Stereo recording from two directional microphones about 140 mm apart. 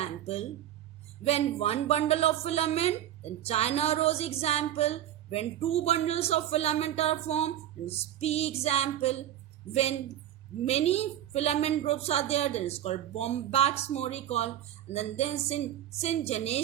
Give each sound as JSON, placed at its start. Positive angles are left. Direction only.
{"t": 0.0, "sound": "speech", "side_deg": 50}
{"t": 10.7, "sound": "speech", "side_deg": 45}